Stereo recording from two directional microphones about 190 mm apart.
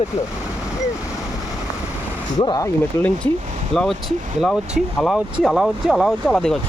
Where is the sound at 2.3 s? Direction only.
20° left (ahead or behind).